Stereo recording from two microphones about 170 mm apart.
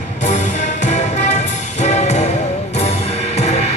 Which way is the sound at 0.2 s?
45° left (ahead or behind).